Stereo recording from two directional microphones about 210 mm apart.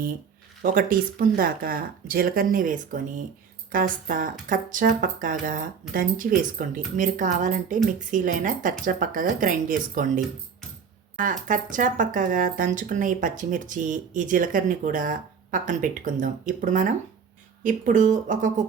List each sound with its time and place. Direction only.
0.6 s speech: 40° right (ahead or behind)
11.2 s speech: 40° right (ahead or behind)